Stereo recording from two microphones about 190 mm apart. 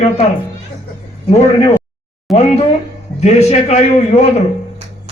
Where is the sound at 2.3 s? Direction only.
35° left (ahead or behind).